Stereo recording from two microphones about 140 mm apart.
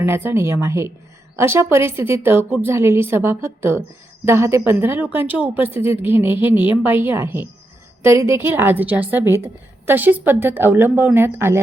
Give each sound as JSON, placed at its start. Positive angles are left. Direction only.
{"t": 0.0, "sound": "a woman's voice", "side_deg": -15}